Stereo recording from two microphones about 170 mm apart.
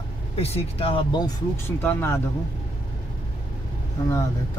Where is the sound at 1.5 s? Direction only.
15° left (ahead or behind).